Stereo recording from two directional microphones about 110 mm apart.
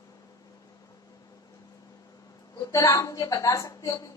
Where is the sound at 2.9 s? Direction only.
35° left (ahead or behind).